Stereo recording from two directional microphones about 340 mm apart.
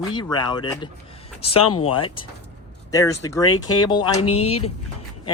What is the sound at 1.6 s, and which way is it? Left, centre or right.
Speech, left.